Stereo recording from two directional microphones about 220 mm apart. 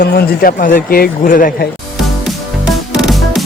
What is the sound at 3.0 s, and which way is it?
Music, centre (ahead or behind).